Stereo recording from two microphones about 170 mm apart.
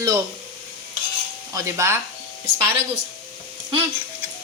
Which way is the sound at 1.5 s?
15° right (ahead or behind).